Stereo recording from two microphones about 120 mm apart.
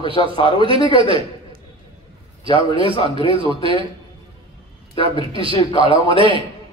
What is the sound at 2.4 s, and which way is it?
A man's voice, 45° right (ahead or behind).